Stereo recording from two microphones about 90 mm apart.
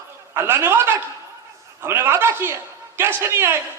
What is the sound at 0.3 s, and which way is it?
A man's voice, 25° right (ahead or behind).